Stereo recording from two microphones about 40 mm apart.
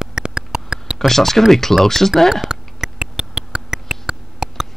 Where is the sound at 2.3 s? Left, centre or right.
Centre.